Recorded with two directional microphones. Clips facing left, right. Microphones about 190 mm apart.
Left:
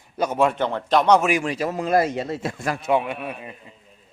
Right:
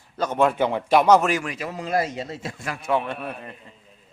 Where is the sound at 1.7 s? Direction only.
55° left (ahead or behind).